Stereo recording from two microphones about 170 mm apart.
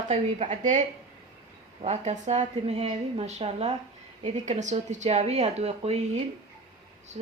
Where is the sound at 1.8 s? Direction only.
45° right (ahead or behind).